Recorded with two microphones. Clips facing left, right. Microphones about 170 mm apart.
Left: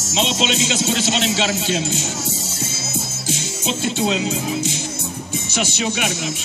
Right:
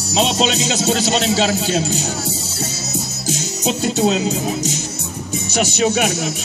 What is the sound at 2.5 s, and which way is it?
Music, 40° right (ahead or behind).